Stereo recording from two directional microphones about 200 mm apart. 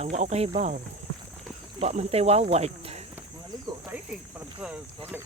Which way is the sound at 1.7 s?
30° right (ahead or behind).